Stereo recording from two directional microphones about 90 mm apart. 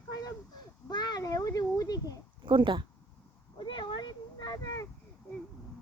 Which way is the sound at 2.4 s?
65° right (ahead or behind).